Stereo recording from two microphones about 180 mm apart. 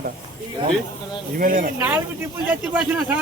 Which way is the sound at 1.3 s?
50° right (ahead or behind).